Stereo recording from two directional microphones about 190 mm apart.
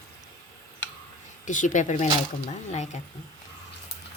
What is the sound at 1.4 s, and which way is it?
Speech, 40° left (ahead or behind).